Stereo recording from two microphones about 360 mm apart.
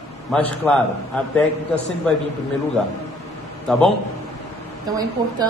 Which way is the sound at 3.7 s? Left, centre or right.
Centre.